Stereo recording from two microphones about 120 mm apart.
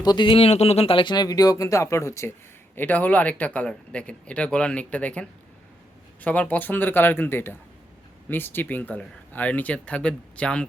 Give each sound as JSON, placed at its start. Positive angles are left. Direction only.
{"t": 0.0, "sound": "speech", "side_deg": 40}